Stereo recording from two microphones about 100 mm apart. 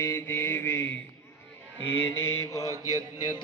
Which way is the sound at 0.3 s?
20° left (ahead or behind).